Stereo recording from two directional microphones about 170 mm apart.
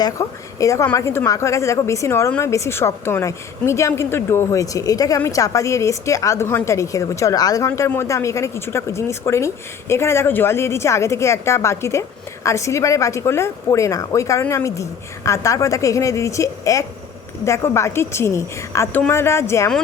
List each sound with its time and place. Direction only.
0.0 s a woman's voice: 20° left (ahead or behind)